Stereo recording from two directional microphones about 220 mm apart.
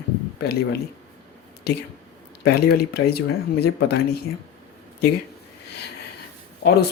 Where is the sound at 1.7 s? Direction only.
50° left (ahead or behind).